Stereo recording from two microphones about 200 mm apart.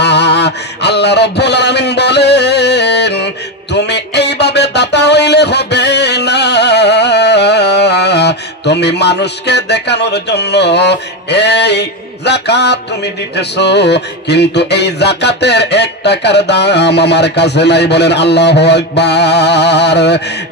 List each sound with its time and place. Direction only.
0.0 s mantra: 55° left (ahead or behind)
3.7 s music: 55° left (ahead or behind)